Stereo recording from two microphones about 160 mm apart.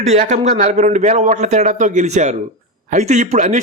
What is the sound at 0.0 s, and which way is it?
A man's voice, 45° right (ahead or behind).